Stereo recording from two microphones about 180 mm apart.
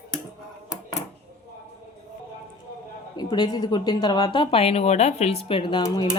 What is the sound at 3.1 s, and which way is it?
Speech, 25° left (ahead or behind).